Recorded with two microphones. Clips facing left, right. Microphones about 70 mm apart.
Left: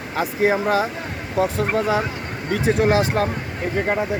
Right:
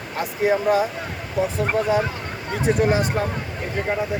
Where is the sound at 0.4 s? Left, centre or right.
Left.